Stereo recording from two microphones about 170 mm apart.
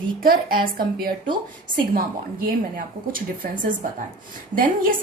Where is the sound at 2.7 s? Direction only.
55° right (ahead or behind).